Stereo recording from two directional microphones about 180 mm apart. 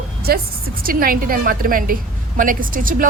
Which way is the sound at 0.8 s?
55° right (ahead or behind).